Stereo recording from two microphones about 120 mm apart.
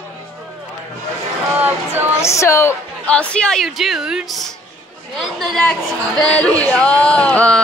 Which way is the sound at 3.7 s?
5° right (ahead or behind).